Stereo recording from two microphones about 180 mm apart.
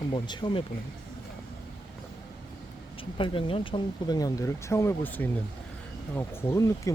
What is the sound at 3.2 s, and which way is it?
Speech, 30° left (ahead or behind).